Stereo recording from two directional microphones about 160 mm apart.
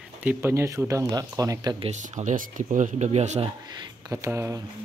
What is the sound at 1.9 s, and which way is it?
Speech, 50° right (ahead or behind).